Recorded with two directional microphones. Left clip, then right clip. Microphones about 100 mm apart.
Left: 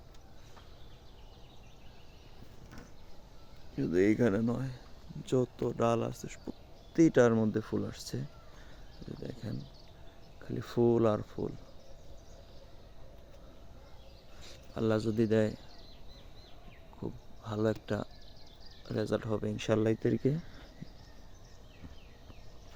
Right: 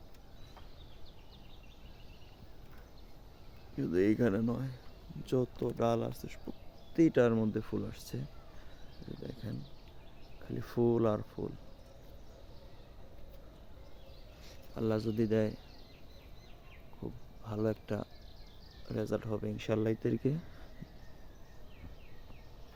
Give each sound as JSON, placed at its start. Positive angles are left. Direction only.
{"t": 3.8, "sound": "speech", "side_deg": 30}
{"t": 6.9, "sound": "speech", "side_deg": 55}
{"t": 9.2, "sound": "speech", "side_deg": 45}
{"t": 14.4, "sound": "speech", "side_deg": 65}
{"t": 17.0, "sound": "speech", "side_deg": 60}
{"t": 20.0, "sound": "speech", "side_deg": 30}